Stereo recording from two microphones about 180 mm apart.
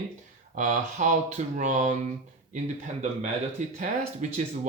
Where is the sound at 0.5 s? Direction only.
45° right (ahead or behind).